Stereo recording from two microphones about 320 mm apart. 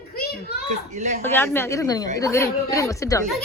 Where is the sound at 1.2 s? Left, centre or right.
Centre.